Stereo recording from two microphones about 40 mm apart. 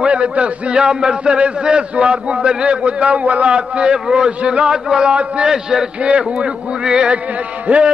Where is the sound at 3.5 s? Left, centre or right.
Right.